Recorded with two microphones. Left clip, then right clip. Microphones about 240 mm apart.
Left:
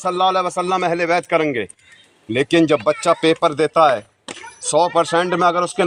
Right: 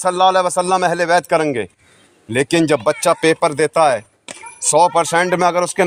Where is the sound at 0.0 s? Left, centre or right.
Right.